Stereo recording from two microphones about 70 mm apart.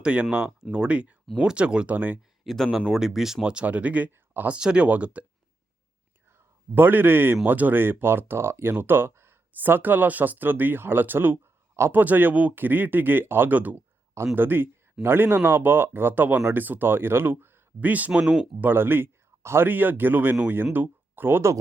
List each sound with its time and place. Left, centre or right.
0.0 s speech: centre
2.4 s speech: centre; by 5.2 s right
6.7 s speech: right